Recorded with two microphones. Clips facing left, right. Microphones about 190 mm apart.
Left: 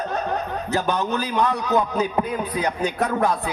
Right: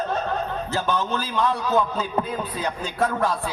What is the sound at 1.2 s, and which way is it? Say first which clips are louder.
A man's voice: left 2 dB; 65° left (ahead or behind).